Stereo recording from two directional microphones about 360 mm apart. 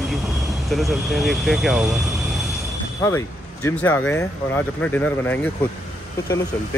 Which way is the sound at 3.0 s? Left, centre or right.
Centre.